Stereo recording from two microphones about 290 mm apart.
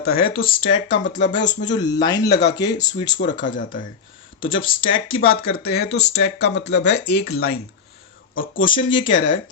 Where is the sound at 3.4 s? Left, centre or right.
Left.